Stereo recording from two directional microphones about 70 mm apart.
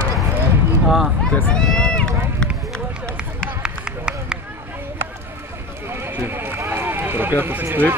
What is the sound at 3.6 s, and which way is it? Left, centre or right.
Run, centre.